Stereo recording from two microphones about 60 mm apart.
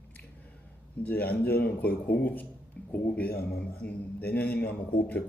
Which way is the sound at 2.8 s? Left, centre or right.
Centre.